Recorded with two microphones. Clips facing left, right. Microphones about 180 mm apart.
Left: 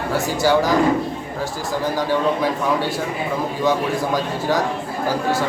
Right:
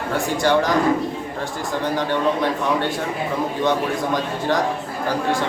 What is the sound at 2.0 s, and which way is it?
Speech, 5° left (ahead or behind).